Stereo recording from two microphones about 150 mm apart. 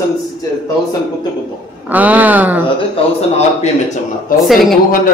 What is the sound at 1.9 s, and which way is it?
Speech, 10° right (ahead or behind).